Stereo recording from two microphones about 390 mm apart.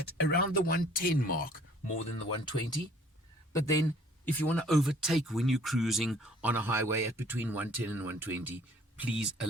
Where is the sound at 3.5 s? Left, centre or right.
Centre.